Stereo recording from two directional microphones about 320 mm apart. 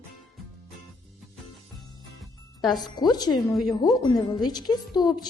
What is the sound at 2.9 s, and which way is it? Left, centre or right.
A woman's voice, centre.